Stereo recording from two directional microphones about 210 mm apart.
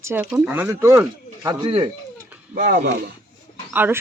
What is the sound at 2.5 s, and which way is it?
Speech, 40° right (ahead or behind).